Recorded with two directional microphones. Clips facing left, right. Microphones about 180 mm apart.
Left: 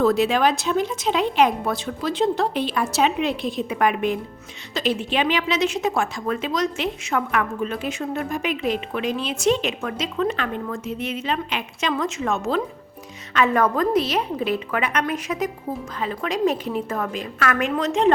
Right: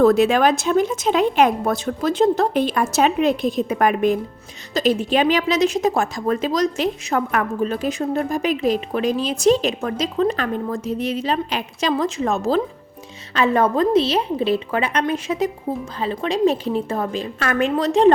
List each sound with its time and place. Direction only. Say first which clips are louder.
0.0 s a woman's voice: right 4 dB; 50° right (ahead or behind); by 18.1 s 35° right (ahead or behind)